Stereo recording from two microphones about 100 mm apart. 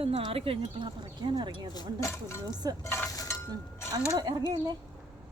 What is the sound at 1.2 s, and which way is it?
Speech, 50° right (ahead or behind).